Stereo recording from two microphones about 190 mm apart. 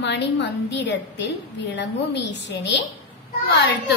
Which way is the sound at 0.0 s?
65° left (ahead or behind).